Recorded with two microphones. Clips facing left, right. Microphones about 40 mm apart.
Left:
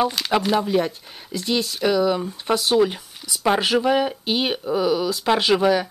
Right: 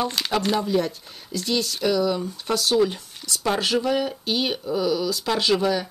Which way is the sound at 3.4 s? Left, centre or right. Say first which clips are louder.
Left 4 dB; centre.